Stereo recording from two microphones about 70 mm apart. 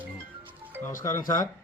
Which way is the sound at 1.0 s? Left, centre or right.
Left.